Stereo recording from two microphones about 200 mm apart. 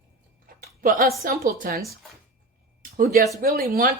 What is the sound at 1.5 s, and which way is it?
Speech, 45° right (ahead or behind).